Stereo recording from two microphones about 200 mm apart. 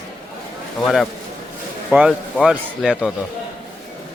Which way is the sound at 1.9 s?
5° right (ahead or behind).